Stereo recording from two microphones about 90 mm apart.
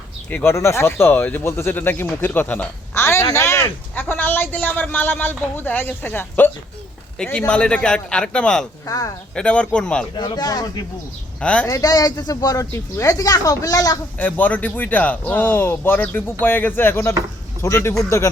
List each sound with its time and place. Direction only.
0.3 s speech: 20° left (ahead or behind)
0.5 s speech: 30° left (ahead or behind)
3.9 s a man's voice: 20° left (ahead or behind)
8.9 s a man's voice: 40° left (ahead or behind)
9.3 s a man's voice: 10° left (ahead or behind)
10.2 s speech: 55° left (ahead or behind)
11.3 s speech: 10° left (ahead or behind)
11.6 s speech: 45° left (ahead or behind)
14.2 s a man's voice: 20° left (ahead or behind); by 18.3 s 35° left (ahead or behind)